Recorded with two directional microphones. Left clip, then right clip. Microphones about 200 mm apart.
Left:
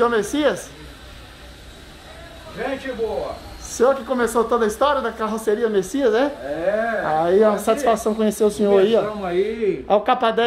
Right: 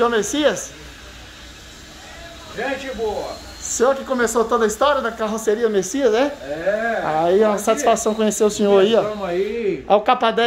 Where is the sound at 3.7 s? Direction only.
5° right (ahead or behind).